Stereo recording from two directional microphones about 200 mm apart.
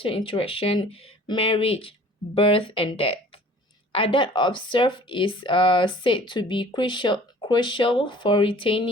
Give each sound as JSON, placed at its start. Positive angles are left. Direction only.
{"t": 0.0, "sound": "speech", "side_deg": 25}